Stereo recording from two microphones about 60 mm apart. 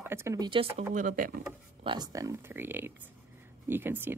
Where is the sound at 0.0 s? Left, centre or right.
Right.